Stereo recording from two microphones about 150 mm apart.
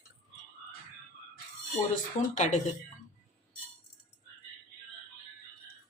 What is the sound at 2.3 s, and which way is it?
Speech, 55° left (ahead or behind).